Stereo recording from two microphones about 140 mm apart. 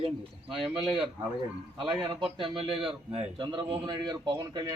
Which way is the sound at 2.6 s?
40° right (ahead or behind).